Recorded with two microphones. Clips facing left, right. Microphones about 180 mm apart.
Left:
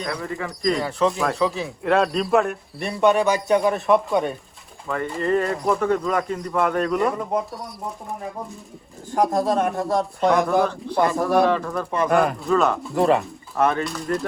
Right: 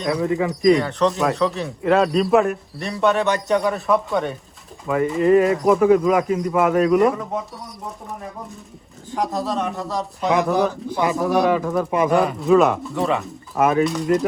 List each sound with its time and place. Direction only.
0.2 s speech: 20° right (ahead or behind)
0.6 s speech: centre (ahead or behind)
2.9 s speech: 15° left (ahead or behind)
3.3 s speech: centre (ahead or behind)
9.1 s speech: 50° left (ahead or behind)
10.2 s speech: centre (ahead or behind)